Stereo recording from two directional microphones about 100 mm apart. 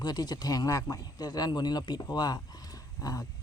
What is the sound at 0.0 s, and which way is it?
Speech, 40° left (ahead or behind).